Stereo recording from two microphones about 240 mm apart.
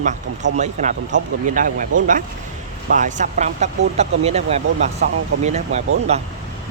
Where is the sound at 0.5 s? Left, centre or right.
Right.